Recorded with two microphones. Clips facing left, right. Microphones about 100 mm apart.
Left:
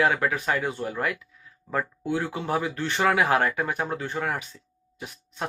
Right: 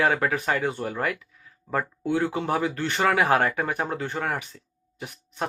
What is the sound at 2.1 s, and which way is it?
Speech, 20° right (ahead or behind).